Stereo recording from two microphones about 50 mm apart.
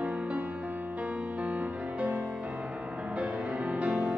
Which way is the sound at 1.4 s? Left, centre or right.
Right.